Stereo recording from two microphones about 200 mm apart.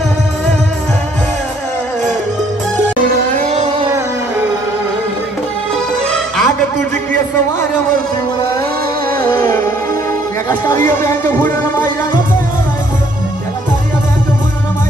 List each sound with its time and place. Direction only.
3.3 s a sound: 35° right (ahead or behind)
6.0 s music: 5° left (ahead or behind)
10.9 s music: 10° left (ahead or behind)
11.4 s music: 40° right (ahead or behind)